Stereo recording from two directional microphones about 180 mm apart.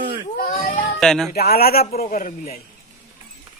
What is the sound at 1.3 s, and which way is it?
Speech, 60° left (ahead or behind).